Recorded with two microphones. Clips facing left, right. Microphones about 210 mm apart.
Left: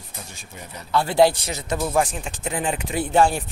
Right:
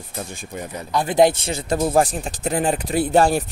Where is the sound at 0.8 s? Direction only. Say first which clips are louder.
Right 1 dB; 20° right (ahead or behind).